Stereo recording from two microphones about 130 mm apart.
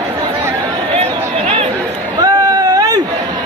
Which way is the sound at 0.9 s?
50° right (ahead or behind).